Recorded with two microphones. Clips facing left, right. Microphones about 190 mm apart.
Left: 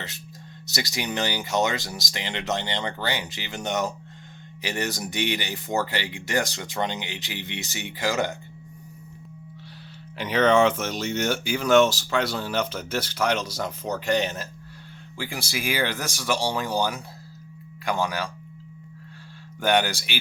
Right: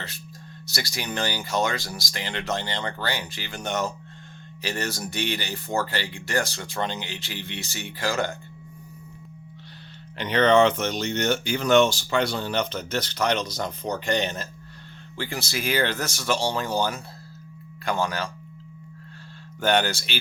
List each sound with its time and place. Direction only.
0.7 s speech: 20° left (ahead or behind)
10.2 s speech: 5° left (ahead or behind)
19.6 s speech: 15° left (ahead or behind)